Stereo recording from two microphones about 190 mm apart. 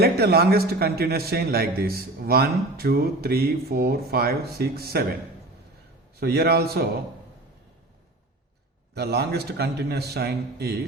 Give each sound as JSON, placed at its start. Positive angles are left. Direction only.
{"t": 0.0, "sound": "a man's voice", "side_deg": -55}
{"t": 6.1, "sound": "a man's voice", "side_deg": -55}
{"t": 9.0, "sound": "a man's voice", "side_deg": -60}